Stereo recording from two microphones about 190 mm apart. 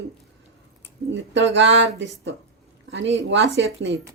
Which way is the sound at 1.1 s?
75° right (ahead or behind).